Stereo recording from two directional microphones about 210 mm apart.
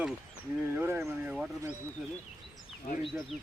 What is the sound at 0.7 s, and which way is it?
Speech, 10° right (ahead or behind).